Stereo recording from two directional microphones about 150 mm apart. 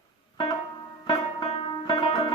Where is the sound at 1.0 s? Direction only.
40° left (ahead or behind).